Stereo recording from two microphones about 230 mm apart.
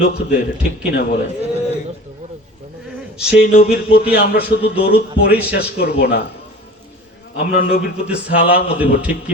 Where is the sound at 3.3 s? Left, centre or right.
Left.